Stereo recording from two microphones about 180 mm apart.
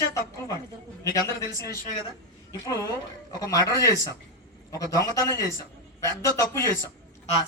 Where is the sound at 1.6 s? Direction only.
55° left (ahead or behind).